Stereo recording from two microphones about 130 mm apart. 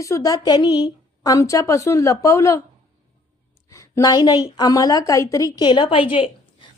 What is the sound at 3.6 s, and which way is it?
A woman's voice, 25° left (ahead or behind).